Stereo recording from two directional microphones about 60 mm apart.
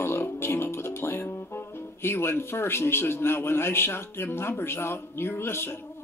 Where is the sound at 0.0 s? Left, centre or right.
Left.